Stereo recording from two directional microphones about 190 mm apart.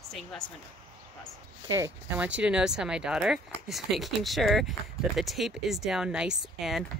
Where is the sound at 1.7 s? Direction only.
15° right (ahead or behind).